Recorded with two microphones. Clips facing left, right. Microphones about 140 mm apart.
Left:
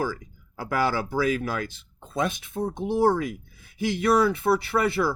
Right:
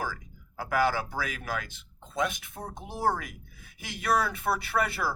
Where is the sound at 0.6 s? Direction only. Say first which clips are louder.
Left 2 dB; 30° left (ahead or behind).